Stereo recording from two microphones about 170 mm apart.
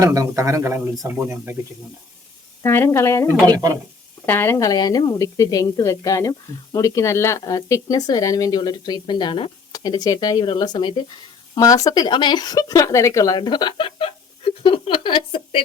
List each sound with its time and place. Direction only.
0.0 s a man's voice: 20° right (ahead or behind)
2.6 s a woman's voice: 15° left (ahead or behind)
4.3 s speech: 15° left (ahead or behind); by 15.6 s 30° left (ahead or behind)